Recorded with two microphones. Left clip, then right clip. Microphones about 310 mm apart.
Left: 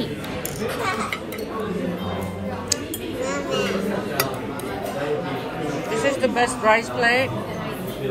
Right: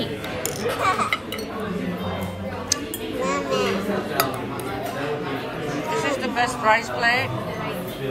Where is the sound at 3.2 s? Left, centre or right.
Right.